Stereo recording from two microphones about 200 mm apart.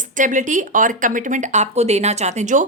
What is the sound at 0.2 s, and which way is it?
Speech, 40° right (ahead or behind).